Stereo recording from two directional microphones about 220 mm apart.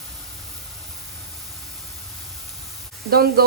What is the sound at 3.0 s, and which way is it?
Speech, 45° right (ahead or behind).